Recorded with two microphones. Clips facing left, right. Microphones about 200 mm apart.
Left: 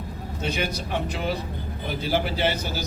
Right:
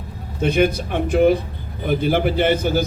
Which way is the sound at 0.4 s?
55° right (ahead or behind).